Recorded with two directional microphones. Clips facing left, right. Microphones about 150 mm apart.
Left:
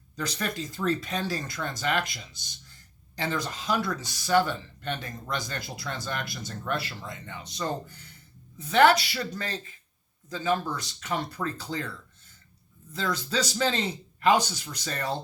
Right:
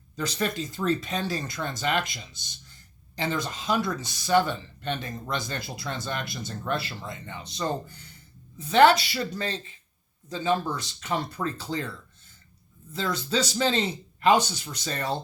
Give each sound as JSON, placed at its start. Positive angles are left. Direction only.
{"t": 0.2, "sound": "speech", "side_deg": -25}
{"t": 12.9, "sound": "speech", "side_deg": -25}